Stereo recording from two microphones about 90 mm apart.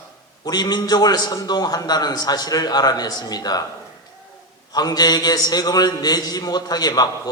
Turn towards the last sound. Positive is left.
turn(degrees=45)  # may be behind; listen again after turning